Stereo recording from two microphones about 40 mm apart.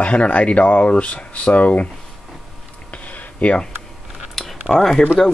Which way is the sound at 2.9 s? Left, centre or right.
Left.